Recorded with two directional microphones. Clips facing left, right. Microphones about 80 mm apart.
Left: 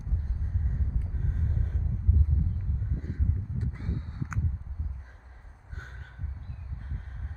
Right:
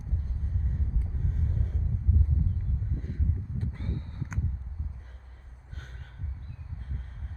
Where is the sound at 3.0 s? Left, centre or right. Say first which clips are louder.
Even; centre.